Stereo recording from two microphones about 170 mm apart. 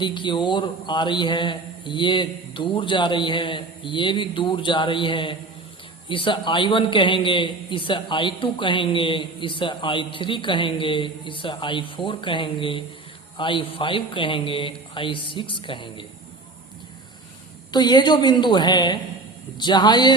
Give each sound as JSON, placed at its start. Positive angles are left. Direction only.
{"t": 0.0, "sound": "a man's voice", "side_deg": 25}
{"t": 17.7, "sound": "a man's voice", "side_deg": 25}